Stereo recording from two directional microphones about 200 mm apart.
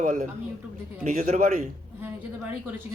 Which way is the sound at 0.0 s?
45° right (ahead or behind).